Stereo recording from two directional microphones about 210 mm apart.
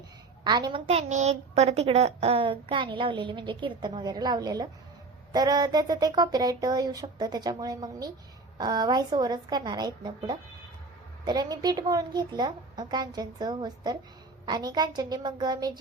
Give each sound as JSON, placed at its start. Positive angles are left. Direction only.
{"t": 0.4, "sound": "a woman's voice", "side_deg": -20}